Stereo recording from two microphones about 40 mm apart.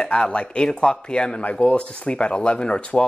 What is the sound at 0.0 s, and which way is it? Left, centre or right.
Speech, left.